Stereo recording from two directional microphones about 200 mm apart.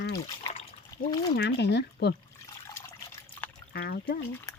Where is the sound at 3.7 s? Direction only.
50° left (ahead or behind).